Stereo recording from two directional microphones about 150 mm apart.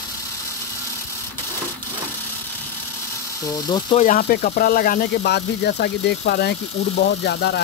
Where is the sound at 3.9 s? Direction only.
60° left (ahead or behind); by 7.6 s 90° left.